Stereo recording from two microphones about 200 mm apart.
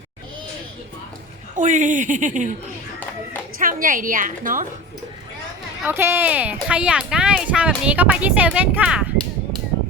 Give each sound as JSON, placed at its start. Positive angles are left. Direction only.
{"t": 1.5, "sound": "speech", "side_deg": -40}
{"t": 3.6, "sound": "a woman's voice", "side_deg": -45}
{"t": 5.8, "sound": "speech", "side_deg": -10}